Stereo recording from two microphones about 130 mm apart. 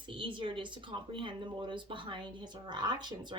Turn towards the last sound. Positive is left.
turn(degrees=-35)  # may be behind; listen again after turning